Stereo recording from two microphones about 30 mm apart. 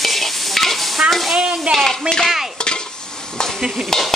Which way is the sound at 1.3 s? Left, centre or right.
Centre.